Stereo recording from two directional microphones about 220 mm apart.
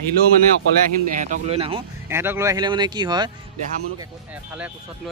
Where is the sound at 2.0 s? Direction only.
10° right (ahead or behind).